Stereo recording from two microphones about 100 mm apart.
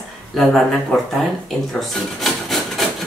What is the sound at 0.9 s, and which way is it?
Speech, 10° left (ahead or behind).